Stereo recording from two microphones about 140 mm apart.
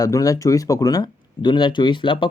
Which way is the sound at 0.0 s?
25° left (ahead or behind).